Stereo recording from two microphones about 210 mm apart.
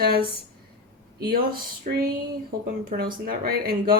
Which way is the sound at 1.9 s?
40° right (ahead or behind).